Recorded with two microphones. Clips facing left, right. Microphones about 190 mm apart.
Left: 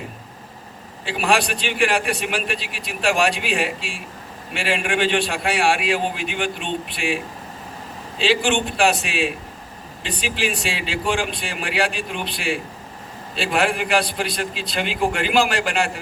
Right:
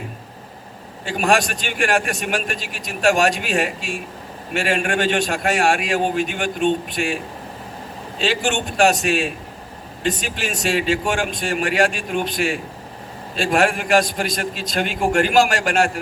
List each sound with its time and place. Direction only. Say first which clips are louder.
1.0 s a man's voice: right 2 dB; 45° right (ahead or behind)
8.2 s a man's voice: left 2 dB; 45° right (ahead or behind)